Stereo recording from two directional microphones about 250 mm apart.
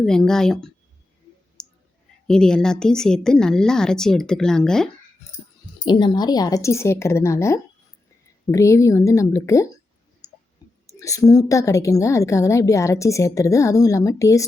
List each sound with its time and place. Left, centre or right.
0.0 s a woman's voice: centre
1.6 s clicking: centre
2.2 s a woman's voice: centre
5.8 s a woman's voice: centre
10.8 s a woman's voice: centre